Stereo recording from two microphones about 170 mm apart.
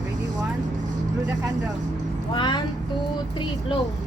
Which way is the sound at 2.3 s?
30° left (ahead or behind).